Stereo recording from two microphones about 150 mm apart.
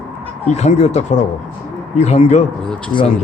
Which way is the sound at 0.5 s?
45° left (ahead or behind).